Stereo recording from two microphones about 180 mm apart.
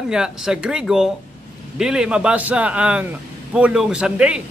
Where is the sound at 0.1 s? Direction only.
5° right (ahead or behind).